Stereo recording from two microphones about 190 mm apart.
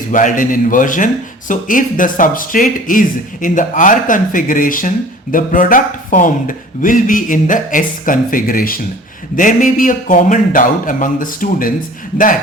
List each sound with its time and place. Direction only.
0.1 s speech: 45° left (ahead or behind)